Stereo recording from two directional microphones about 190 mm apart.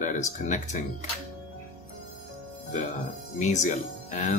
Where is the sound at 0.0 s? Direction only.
40° left (ahead or behind).